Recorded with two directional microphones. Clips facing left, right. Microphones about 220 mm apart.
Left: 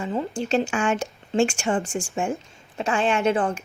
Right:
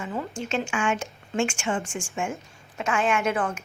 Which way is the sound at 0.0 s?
30° left (ahead or behind).